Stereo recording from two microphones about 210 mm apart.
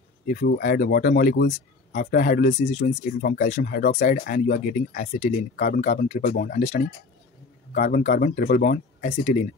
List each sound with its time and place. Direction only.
0.3 s speech: 45° left (ahead or behind)
2.6 s speech: 30° left (ahead or behind)